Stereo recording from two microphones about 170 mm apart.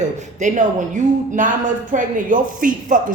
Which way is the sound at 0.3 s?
45° right (ahead or behind).